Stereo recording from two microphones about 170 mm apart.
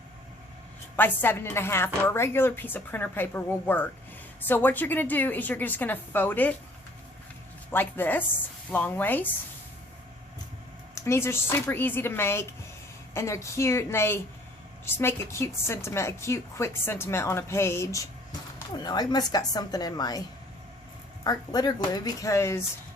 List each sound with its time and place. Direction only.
0.9 s a woman's voice: 10° left (ahead or behind)
7.7 s a woman's voice: 10° left (ahead or behind)
10.9 s a woman's voice: 15° left (ahead or behind)
21.2 s a woman's voice: 20° left (ahead or behind)